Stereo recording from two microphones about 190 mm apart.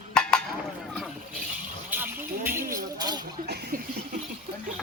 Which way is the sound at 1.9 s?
10° right (ahead or behind).